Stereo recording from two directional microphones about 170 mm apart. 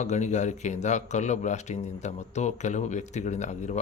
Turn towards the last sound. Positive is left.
turn(degrees=45)  # may be behind; listen again after turning